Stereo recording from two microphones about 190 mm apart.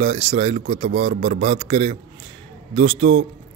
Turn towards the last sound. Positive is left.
turn(degrees=-30)  # may be behind; listen again after turning